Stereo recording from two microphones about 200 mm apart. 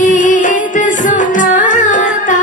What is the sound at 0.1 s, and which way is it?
Music, 40° left (ahead or behind).